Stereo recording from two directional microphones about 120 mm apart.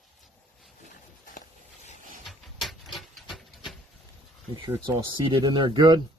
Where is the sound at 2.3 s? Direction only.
Centre (ahead or behind).